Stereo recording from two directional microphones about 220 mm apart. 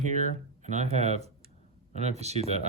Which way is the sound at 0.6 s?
30° right (ahead or behind).